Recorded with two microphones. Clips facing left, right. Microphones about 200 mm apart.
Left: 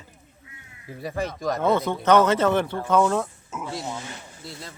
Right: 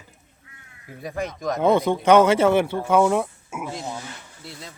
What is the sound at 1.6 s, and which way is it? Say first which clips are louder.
Speech: right 5 dB; 15° right (ahead or behind).